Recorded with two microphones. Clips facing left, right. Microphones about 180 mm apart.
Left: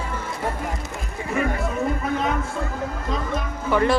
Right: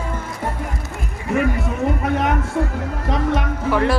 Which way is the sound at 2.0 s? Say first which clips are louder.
Right 4 dB; 70° right (ahead or behind).